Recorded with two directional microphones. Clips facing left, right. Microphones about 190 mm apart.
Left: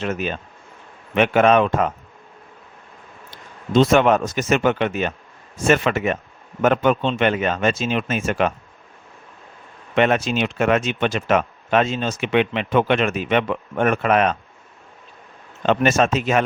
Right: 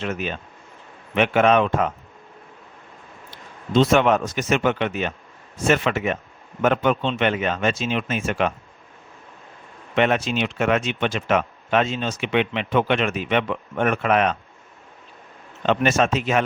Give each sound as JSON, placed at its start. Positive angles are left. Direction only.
{"t": 0.0, "sound": "speech", "side_deg": 40}
{"t": 3.7, "sound": "speech", "side_deg": 45}
{"t": 9.9, "sound": "speech", "side_deg": 45}
{"t": 15.6, "sound": "speech", "side_deg": 45}